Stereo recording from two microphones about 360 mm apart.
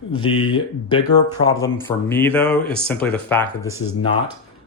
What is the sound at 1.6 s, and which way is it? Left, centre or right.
Speech, centre.